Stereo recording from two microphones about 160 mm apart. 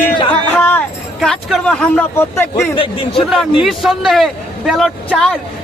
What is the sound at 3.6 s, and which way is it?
Speech, centre (ahead or behind).